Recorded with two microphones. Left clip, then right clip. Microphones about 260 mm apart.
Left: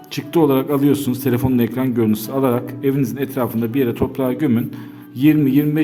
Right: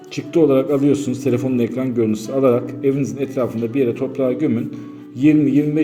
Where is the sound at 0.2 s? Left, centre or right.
Centre.